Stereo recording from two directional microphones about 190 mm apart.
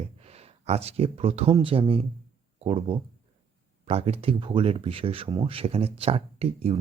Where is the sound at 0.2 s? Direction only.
30° right (ahead or behind).